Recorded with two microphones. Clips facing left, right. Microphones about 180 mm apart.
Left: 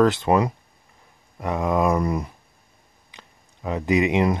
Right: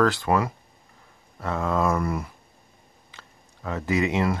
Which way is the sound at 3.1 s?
15° left (ahead or behind).